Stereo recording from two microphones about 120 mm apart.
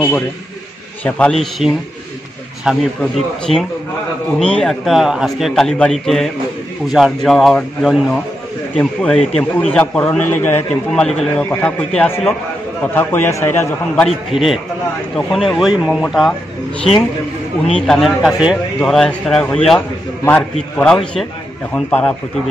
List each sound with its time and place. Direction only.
1.0 s a man's voice: 10° left (ahead or behind)
10.9 s a man's voice: 5° left (ahead or behind); by 14.0 s 20° left (ahead or behind)
14.0 s a man's voice: centre (ahead or behind)
17.6 s a man's voice: 5° left (ahead or behind)